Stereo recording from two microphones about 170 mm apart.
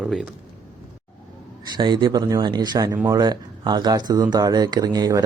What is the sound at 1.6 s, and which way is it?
Speech, 25° right (ahead or behind).